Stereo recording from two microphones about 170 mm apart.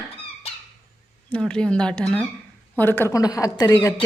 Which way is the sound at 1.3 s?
5° left (ahead or behind).